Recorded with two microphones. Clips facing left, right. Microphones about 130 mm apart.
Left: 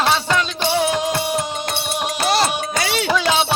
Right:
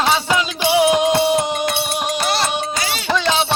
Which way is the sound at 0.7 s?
15° right (ahead or behind).